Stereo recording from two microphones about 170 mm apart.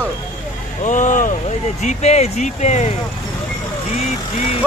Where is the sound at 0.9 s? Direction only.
45° left (ahead or behind).